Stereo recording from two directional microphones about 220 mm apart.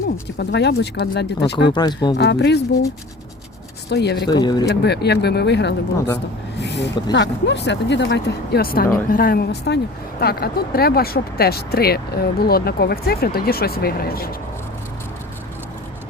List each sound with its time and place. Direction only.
0.3 s speech: 50° left (ahead or behind)
1.7 s speech: 20° left (ahead or behind)
2.1 s speech: 50° left (ahead or behind)
3.8 s speech: 50° left (ahead or behind)
4.3 s speech: 20° left (ahead or behind)
4.7 s speech: 50° left (ahead or behind)